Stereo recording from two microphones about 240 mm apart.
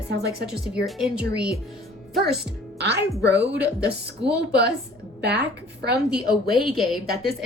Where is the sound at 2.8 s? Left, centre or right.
Right.